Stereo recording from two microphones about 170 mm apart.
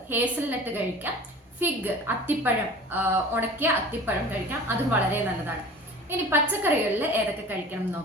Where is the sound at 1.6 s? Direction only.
10° right (ahead or behind).